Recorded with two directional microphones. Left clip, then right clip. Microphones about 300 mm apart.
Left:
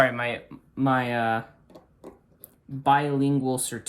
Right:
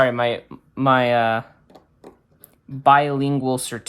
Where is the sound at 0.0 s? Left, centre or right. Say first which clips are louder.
Right 5 dB; centre.